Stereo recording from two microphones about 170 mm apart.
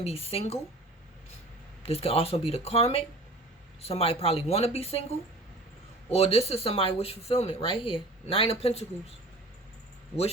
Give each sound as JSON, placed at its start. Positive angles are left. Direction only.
{"t": 0.0, "sound": "speech", "side_deg": 35}
{"t": 1.8, "sound": "speech", "side_deg": 35}